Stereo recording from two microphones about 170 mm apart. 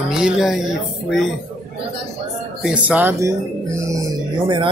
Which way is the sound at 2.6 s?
5° right (ahead or behind).